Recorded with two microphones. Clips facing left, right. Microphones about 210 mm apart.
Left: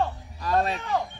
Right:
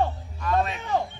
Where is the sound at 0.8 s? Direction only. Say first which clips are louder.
Right 1 dB; 15° right (ahead or behind).